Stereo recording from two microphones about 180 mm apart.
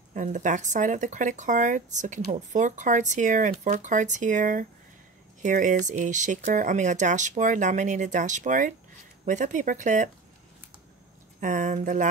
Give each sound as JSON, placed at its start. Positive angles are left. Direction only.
{"t": 0.1, "sound": "speech", "side_deg": -45}
{"t": 11.4, "sound": "speech", "side_deg": -45}